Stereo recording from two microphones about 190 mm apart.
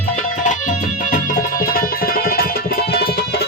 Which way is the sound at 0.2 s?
40° left (ahead or behind).